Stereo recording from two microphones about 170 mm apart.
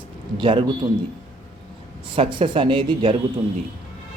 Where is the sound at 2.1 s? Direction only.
30° right (ahead or behind).